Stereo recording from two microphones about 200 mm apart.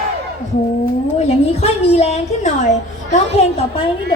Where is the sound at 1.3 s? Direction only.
30° left (ahead or behind).